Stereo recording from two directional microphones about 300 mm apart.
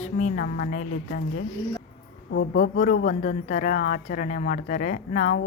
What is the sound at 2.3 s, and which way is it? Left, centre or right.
Speech, left.